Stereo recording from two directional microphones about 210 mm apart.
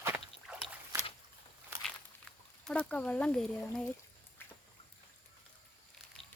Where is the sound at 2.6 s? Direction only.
5° left (ahead or behind).